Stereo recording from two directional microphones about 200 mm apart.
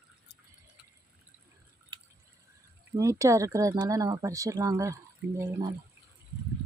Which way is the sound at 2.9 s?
15° right (ahead or behind).